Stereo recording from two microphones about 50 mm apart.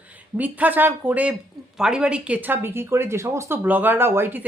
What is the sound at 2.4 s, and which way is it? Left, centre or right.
Speech, right.